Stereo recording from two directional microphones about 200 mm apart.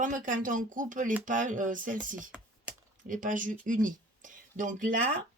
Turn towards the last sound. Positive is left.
turn(degrees=-40)  # may be behind; listen again after turning